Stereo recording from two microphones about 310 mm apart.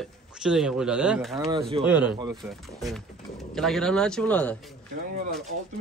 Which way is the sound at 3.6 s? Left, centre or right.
Centre.